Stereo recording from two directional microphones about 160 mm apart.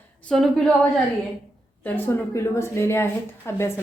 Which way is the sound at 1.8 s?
15° left (ahead or behind).